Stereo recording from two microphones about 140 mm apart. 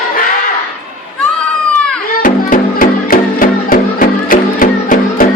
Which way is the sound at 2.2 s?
80° left.